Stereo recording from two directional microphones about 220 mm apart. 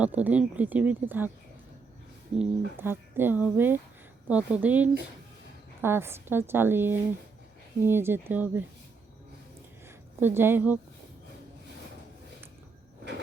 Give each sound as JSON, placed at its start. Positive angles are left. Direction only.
{"t": 0.0, "sound": "speech", "side_deg": -5}
{"t": 2.4, "sound": "speech", "side_deg": -10}
{"t": 10.2, "sound": "speech", "side_deg": -10}